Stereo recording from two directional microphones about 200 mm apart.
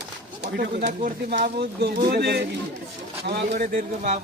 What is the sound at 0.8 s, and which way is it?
Speech, 40° right (ahead or behind).